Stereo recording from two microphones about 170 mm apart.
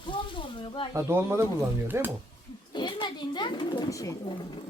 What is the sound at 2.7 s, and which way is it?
Speech, 25° left (ahead or behind).